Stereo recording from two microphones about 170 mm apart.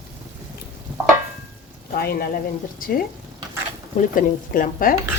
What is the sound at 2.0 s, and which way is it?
Speech, 60° left (ahead or behind).